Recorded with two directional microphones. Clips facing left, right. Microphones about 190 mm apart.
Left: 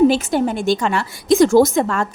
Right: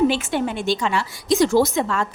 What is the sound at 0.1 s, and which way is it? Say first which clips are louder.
A woman's voice: left 5 dB; 40° left (ahead or behind).